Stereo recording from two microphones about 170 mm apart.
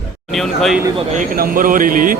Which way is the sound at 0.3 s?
Centre (ahead or behind).